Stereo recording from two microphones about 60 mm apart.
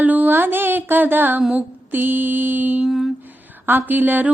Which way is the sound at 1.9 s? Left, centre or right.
Right.